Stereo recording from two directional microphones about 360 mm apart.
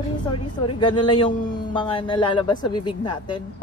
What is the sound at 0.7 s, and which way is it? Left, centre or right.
A man's voice, centre.